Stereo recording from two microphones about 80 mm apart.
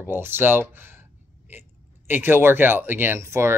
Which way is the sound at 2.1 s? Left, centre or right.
Right.